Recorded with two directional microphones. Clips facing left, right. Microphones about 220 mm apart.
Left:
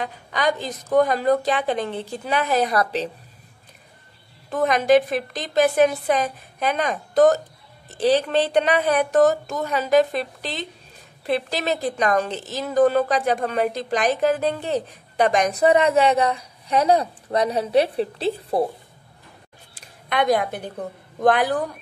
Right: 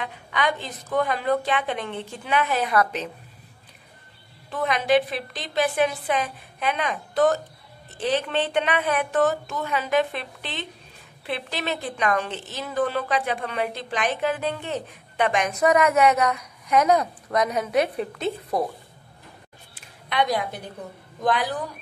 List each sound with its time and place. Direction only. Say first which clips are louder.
0.0 s a woman's voice: left 3 dB; 40° left (ahead or behind)
4.5 s a woman's voice: left 5 dB; 45° left (ahead or behind)
19.7 s a sound: left 4 dB; 50° left (ahead or behind)
21.2 s a woman's voice: left 6 dB; 55° left (ahead or behind)